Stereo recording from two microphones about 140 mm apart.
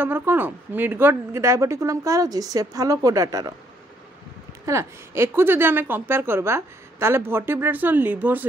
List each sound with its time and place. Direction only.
0.0 s a woman's voice: 15° right (ahead or behind)
4.6 s a woman's voice: 20° right (ahead or behind)